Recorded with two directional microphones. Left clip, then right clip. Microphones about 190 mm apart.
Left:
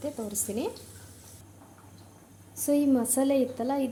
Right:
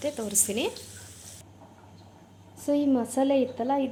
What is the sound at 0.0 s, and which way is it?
Speech, centre (ahead or behind).